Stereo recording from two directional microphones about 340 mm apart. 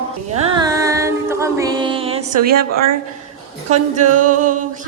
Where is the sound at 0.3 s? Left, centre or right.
Centre.